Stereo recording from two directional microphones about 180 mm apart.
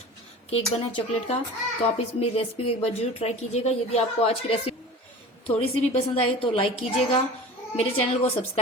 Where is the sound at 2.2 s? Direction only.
35° left (ahead or behind).